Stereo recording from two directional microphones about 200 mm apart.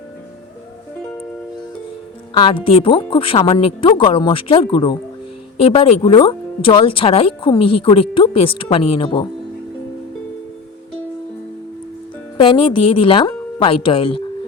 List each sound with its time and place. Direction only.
2.3 s speech: 25° left (ahead or behind)
12.4 s speech: 25° left (ahead or behind)